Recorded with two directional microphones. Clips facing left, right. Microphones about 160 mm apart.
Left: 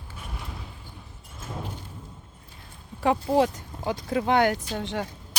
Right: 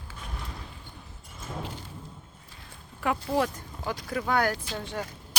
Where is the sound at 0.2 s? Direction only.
5° left (ahead or behind).